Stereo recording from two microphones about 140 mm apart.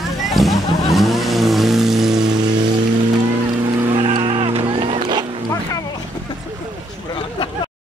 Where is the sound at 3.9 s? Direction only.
40° right (ahead or behind).